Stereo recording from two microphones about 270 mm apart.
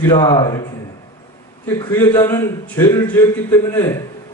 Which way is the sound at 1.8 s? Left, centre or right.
Centre.